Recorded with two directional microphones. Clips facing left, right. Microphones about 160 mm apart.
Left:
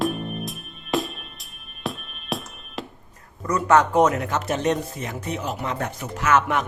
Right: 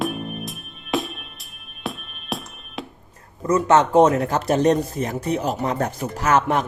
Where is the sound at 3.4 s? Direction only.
25° right (ahead or behind).